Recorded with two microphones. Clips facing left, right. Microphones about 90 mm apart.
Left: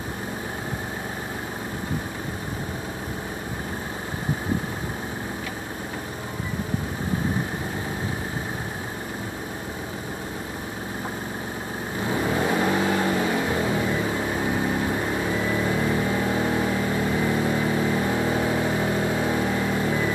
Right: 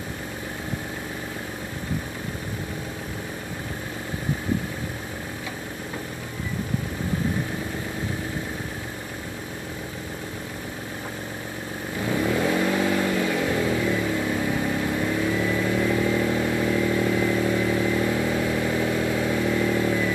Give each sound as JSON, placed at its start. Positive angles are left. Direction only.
{"t": 12.1, "sound": "vehicle", "side_deg": 30}